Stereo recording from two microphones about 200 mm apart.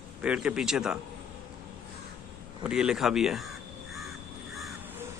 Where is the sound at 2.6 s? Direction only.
5° right (ahead or behind).